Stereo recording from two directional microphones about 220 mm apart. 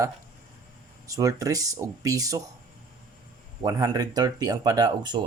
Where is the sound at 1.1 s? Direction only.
15° right (ahead or behind).